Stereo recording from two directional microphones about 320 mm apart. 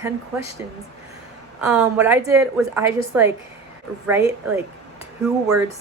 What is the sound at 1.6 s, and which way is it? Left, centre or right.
A woman's voice, centre.